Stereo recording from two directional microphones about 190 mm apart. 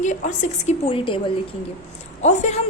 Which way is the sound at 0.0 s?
40° left (ahead or behind).